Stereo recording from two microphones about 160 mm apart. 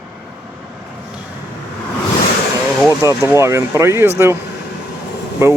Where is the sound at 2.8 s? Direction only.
15° right (ahead or behind).